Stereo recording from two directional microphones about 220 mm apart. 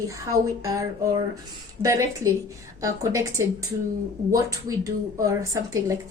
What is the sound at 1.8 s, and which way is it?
A woman's voice, 15° right (ahead or behind).